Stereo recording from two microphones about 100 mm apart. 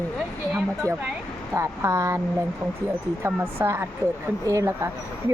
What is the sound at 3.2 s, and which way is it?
A woman's voice, 25° right (ahead or behind).